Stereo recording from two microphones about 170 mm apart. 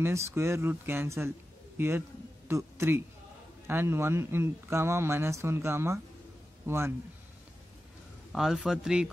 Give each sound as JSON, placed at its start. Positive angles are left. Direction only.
{"t": 0.0, "sound": "a man's voice", "side_deg": -15}
{"t": 8.3, "sound": "a man's voice", "side_deg": 0}